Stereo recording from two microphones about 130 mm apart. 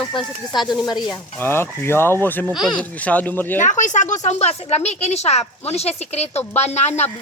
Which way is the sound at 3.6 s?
75° left (ahead or behind).